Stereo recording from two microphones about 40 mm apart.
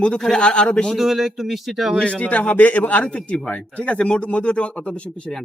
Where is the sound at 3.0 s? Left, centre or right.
Left.